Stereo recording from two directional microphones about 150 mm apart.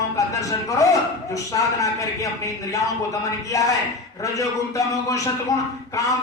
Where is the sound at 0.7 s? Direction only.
20° left (ahead or behind).